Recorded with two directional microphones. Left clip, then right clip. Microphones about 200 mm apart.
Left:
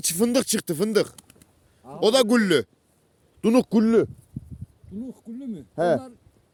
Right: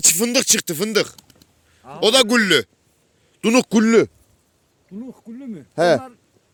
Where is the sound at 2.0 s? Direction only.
10° left (ahead or behind).